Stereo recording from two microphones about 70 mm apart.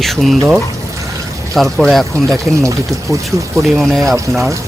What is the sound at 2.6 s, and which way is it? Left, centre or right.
Speech, right.